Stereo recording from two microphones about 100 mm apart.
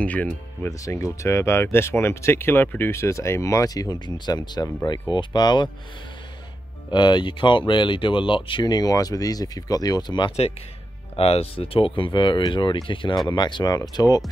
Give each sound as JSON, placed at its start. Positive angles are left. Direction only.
{"t": 0.0, "sound": "speech", "side_deg": 15}
{"t": 0.7, "sound": "speech", "side_deg": 35}
{"t": 6.9, "sound": "speech", "side_deg": 50}
{"t": 11.1, "sound": "speech", "side_deg": 80}